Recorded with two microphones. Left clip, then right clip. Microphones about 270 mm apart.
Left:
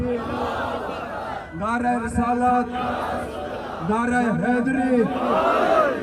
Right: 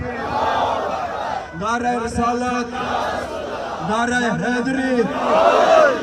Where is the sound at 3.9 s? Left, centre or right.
Centre.